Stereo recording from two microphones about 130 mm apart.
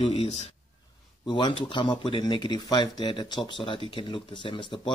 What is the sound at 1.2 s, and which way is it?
Speech, 35° left (ahead or behind).